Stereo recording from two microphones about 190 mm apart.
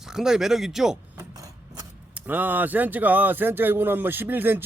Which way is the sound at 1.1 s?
15° right (ahead or behind).